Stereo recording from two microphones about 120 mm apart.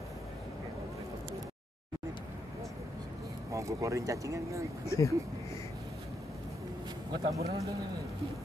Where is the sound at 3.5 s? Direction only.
25° right (ahead or behind).